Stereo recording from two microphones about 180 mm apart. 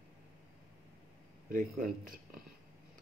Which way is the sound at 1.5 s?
50° right (ahead or behind).